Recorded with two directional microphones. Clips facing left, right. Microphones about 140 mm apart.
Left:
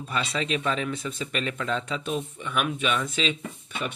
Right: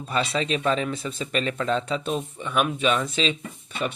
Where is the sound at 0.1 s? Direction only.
30° right (ahead or behind).